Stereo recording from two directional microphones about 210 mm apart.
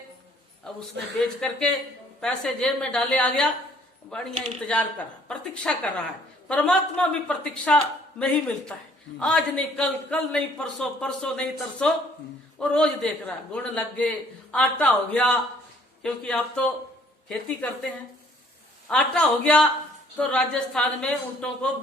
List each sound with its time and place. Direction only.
1.2 s a man's voice: 5° left (ahead or behind)
18.9 s a man's voice: 5° left (ahead or behind)